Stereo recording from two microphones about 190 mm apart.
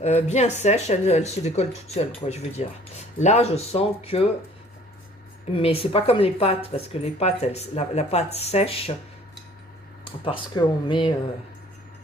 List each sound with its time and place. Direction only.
0.0 s speech: 35° left (ahead or behind)
5.5 s speech: 30° left (ahead or behind)
10.0 s speech: 25° left (ahead or behind)